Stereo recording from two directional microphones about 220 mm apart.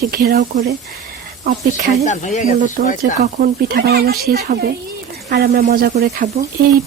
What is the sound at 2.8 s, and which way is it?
Speech, 40° right (ahead or behind).